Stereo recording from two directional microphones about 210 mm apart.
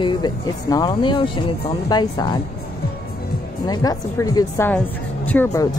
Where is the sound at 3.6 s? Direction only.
20° left (ahead or behind).